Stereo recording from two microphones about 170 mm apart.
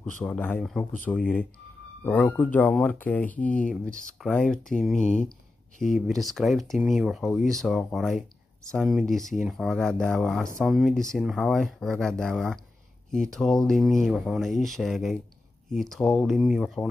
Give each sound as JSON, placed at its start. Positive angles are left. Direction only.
{"t": 0.0, "sound": "speech", "side_deg": 10}
{"t": 4.9, "sound": "speech", "side_deg": 45}
{"t": 5.9, "sound": "speech", "side_deg": 0}